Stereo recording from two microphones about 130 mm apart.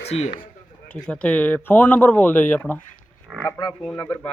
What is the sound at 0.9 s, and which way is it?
Speech, 10° left (ahead or behind).